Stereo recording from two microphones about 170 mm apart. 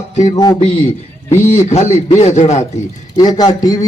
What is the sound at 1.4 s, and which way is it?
Speech, 15° left (ahead or behind).